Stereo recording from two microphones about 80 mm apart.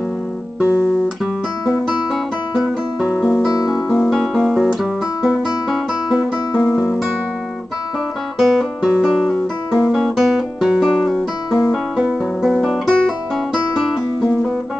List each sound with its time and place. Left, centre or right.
2.5 s music: centre
6.6 s music: left
8.4 s guitar: centre